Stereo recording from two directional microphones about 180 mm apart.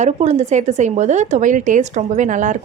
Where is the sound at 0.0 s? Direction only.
40° right (ahead or behind).